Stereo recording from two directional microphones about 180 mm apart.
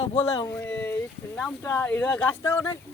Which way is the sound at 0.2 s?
15° left (ahead or behind).